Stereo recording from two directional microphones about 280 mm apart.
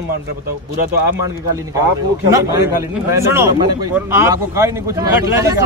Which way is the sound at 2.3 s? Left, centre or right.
Centre.